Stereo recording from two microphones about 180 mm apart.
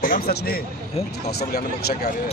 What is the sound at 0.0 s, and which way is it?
Speech, 50° left (ahead or behind).